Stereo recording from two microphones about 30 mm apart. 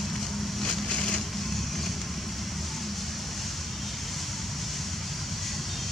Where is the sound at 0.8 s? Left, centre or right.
Centre.